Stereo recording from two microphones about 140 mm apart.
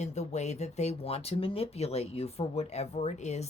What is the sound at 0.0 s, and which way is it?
Speech, 55° left (ahead or behind).